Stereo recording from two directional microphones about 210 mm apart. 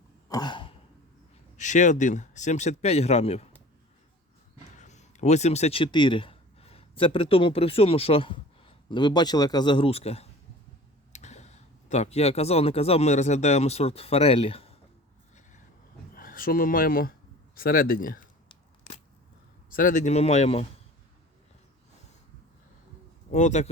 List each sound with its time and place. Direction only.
0.3 s throat clearing: 20° left (ahead or behind)
1.5 s speech: 35° left (ahead or behind)
4.8 s speech: 35° left (ahead or behind)
16.1 s speech: 40° left (ahead or behind)
19.7 s speech: 40° left (ahead or behind)
23.3 s speech: 35° left (ahead or behind)